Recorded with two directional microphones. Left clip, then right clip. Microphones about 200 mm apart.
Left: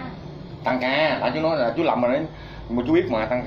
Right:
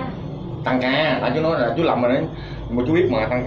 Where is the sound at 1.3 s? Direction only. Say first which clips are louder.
Right 2 dB; 40° left (ahead or behind).